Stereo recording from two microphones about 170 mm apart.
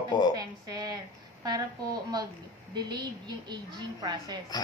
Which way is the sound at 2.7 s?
25° right (ahead or behind).